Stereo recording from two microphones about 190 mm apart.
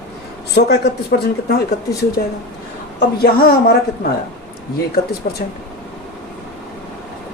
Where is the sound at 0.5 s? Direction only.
60° left (ahead or behind).